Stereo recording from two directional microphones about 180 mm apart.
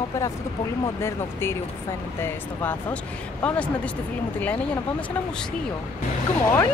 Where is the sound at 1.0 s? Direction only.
15° left (ahead or behind).